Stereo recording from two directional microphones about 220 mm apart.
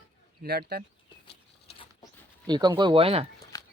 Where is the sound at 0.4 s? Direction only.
45° right (ahead or behind).